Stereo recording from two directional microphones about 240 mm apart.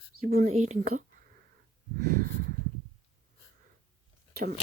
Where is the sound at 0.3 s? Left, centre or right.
Right.